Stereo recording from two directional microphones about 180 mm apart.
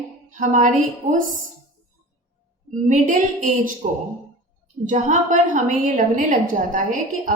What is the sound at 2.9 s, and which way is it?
Speech, 45° right (ahead or behind).